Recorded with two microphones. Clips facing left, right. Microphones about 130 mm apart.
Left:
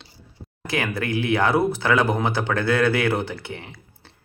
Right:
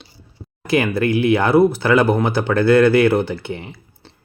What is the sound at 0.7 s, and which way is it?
Speech, 10° right (ahead or behind).